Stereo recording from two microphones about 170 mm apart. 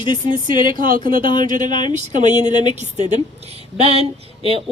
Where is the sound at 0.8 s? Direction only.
55° right (ahead or behind).